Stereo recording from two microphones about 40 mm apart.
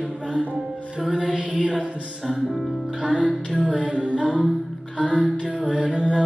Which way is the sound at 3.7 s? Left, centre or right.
Right.